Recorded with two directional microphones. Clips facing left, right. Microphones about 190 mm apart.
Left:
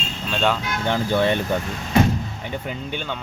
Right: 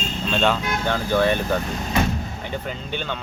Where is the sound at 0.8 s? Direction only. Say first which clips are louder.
Left 1 dB; 20° left (ahead or behind).